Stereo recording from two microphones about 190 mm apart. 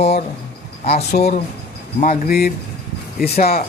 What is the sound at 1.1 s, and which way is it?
A man's voice, 55° left (ahead or behind).